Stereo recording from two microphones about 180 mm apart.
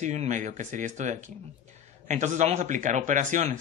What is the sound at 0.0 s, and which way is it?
Speech, 40° right (ahead or behind).